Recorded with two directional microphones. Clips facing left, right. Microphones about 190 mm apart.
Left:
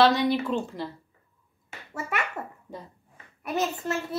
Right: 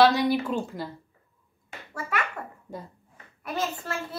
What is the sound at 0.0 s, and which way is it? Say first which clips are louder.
Speech: right 1 dB; centre (ahead or behind).